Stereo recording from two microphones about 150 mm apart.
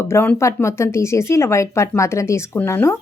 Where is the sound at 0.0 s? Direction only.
15° left (ahead or behind).